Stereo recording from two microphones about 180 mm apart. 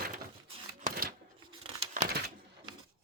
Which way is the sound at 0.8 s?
55° right (ahead or behind).